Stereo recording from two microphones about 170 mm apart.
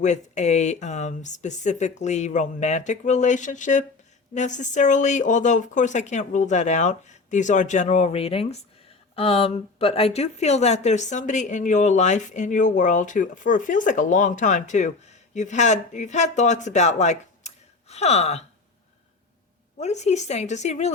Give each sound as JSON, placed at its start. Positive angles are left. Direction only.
{"t": 0.0, "sound": "a woman's voice", "side_deg": 45}
{"t": 19.8, "sound": "a woman's voice", "side_deg": 40}